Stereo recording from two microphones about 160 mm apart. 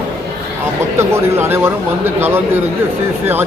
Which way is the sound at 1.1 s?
15° right (ahead or behind).